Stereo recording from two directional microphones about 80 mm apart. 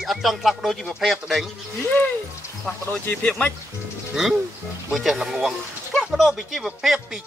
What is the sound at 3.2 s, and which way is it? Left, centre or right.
Speech, centre.